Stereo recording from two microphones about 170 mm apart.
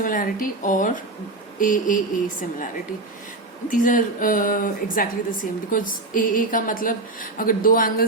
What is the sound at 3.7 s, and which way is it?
A woman's voice, 50° left (ahead or behind).